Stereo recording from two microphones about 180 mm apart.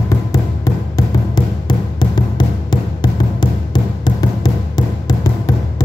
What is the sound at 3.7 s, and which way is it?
Music, 25° left (ahead or behind).